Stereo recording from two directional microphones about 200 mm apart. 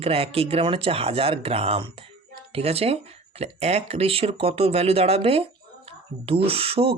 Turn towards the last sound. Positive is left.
turn(degrees=-30)  # may be behind; listen again after turning